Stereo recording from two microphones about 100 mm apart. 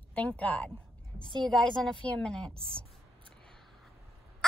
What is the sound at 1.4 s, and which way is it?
A child's voice, 5° left (ahead or behind).